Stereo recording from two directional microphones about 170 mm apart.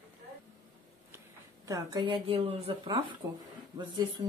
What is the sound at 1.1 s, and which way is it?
Speech, 20° right (ahead or behind).